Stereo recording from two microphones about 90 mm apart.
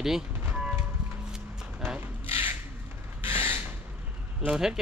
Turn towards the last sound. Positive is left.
turn(degrees=-5)  # may be behind; listen again after turning